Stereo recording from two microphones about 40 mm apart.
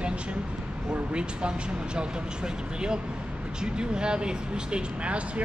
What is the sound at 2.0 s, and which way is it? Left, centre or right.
Speech, right.